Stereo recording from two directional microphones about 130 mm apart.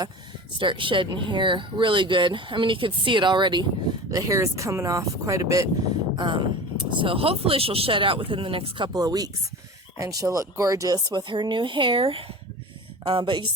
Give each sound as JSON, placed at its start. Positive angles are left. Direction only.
{"t": 0.6, "sound": "speech", "side_deg": -40}
{"t": 4.1, "sound": "speech", "side_deg": -25}
{"t": 6.1, "sound": "speech", "side_deg": -35}
{"t": 8.9, "sound": "speech", "side_deg": -30}